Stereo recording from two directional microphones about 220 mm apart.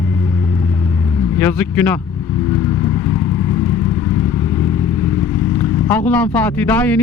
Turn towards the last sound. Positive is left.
turn(degrees=5)  # may be behind; listen again after turning